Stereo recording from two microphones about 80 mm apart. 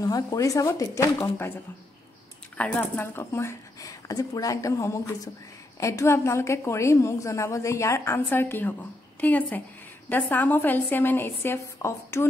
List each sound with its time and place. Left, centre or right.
0.0 s speech: left
2.5 s speech: centre
3.0 s a woman's voice: left